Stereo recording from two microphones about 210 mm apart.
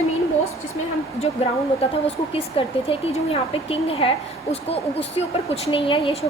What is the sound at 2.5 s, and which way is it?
Speech, 25° left (ahead or behind).